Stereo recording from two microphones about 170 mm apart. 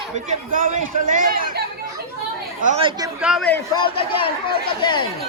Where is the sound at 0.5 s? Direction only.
50° right (ahead or behind).